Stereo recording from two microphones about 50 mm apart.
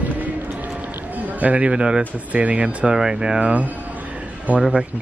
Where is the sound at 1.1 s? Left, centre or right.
Right.